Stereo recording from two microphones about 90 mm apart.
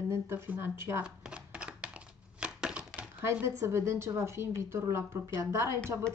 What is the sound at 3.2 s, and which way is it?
A woman's voice, 30° right (ahead or behind).